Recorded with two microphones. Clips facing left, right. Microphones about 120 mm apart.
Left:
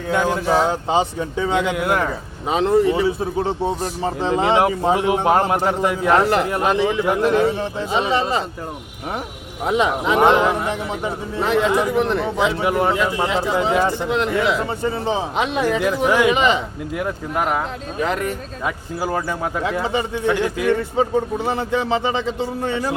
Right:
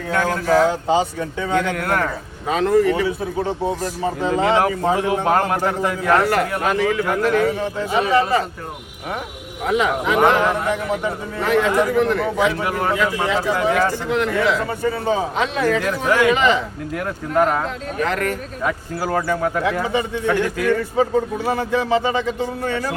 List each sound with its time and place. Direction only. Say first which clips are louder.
0.1 s a man's voice: even; 20° left (ahead or behind)
9.6 s a man's voice: even; 25° left (ahead or behind)